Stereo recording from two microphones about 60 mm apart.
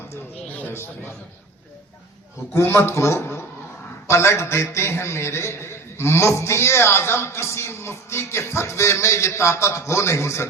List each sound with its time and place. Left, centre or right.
0.4 s a sound: left
0.7 s a man's voice: left
2.5 s a man's voice: left